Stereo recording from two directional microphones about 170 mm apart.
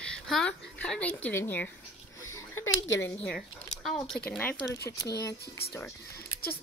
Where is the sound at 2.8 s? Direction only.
90° left.